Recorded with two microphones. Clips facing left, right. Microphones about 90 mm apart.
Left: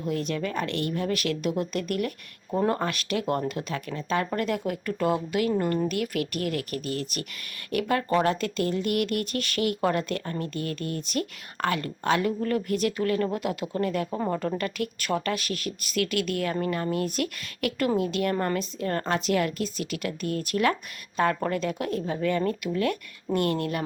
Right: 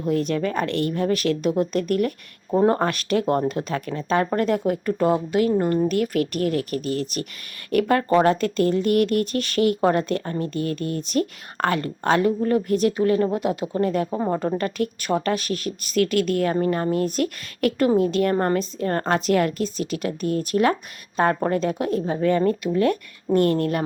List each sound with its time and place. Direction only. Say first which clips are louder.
0.0 s a woman's voice: right 6 dB; 40° right (ahead or behind)
2.7 s speech: right 6 dB; 40° right (ahead or behind)
7.7 s a woman's voice: right 6 dB; 45° right (ahead or behind)
19.6 s a woman's voice: right 5 dB; 30° right (ahead or behind)